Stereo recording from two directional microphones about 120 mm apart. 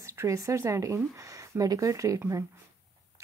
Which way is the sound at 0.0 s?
25° right (ahead or behind).